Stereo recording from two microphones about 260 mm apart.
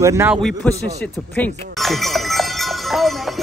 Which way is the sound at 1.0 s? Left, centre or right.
Centre.